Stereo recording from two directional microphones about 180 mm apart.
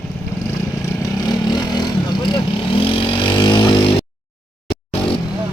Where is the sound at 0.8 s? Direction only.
15° left (ahead or behind).